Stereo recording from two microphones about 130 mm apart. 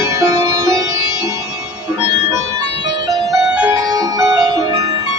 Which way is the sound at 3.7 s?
25° right (ahead or behind).